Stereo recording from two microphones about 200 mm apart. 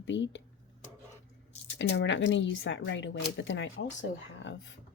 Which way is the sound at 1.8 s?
60° left (ahead or behind).